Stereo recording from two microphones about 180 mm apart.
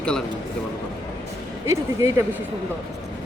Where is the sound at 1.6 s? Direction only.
15° right (ahead or behind).